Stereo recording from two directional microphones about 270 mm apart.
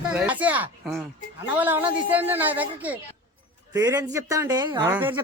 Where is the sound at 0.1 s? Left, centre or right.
Centre.